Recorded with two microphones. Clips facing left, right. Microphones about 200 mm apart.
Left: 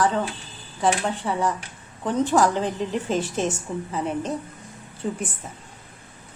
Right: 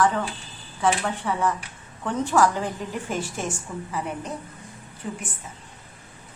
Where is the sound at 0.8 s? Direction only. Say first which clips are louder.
Left 1 dB; 15° left (ahead or behind).